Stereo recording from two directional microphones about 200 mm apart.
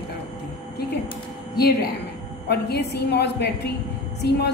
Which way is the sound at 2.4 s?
55° left (ahead or behind).